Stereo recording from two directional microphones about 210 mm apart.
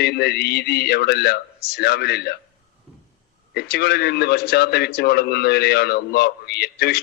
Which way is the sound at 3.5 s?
50° left (ahead or behind).